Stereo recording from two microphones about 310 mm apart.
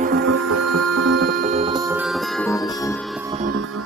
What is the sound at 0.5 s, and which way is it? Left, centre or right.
Music, right.